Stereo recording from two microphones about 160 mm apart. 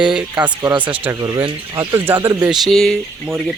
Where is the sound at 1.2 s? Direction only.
30° right (ahead or behind).